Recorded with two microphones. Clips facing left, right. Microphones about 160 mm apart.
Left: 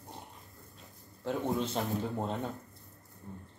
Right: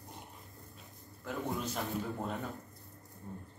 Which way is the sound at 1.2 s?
25° left (ahead or behind).